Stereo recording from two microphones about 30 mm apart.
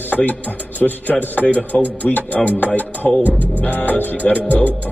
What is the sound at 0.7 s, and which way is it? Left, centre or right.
Music, left.